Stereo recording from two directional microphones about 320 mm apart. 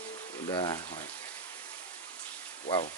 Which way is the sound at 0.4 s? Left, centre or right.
Centre.